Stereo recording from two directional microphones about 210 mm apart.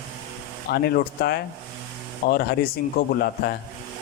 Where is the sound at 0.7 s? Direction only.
50° left (ahead or behind).